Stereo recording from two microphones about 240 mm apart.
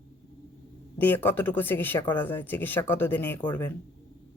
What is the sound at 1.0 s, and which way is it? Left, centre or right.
Speech, centre.